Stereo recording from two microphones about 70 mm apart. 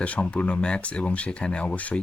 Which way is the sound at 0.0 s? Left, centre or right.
Centre.